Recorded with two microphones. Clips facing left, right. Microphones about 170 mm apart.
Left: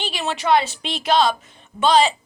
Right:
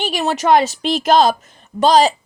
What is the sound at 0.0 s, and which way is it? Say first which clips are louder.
Speech: right 6 dB; 45° right (ahead or behind).